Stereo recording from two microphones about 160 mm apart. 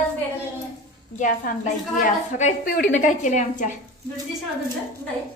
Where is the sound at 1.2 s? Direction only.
55° left (ahead or behind).